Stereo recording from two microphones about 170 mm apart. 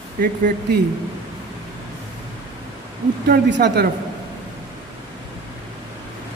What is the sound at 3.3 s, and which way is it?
Speech, 80° right.